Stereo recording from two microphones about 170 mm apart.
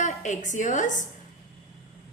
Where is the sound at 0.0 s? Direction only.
45° left (ahead or behind).